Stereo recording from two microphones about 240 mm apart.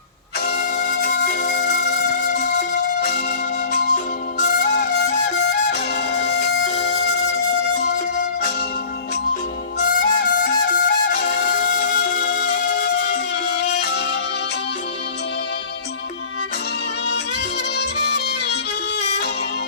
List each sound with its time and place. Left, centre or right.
0.5 s music: left
4.6 s music: left
6.8 s music: left
7.9 s music: left
9.7 s music: left
17.7 s music: left